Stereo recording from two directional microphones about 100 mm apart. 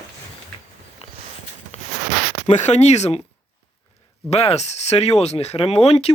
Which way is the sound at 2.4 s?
90° left.